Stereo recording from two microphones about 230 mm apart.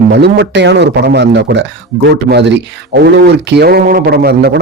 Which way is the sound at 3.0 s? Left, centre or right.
Right.